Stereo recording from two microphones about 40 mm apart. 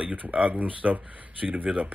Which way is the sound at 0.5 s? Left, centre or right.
Right.